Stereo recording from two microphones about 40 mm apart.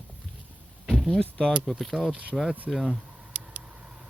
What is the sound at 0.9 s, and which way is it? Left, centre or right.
Door, centre.